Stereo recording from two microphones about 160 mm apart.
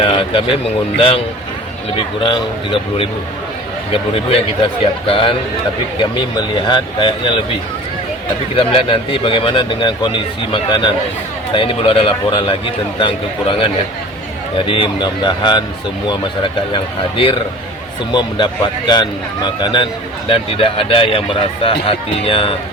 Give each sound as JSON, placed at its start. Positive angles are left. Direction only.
{"t": 0.0, "sound": "speech", "side_deg": 35}
{"t": 2.0, "sound": "speech", "side_deg": 30}
{"t": 3.9, "sound": "speech", "side_deg": 35}
{"t": 8.5, "sound": "speech", "side_deg": 35}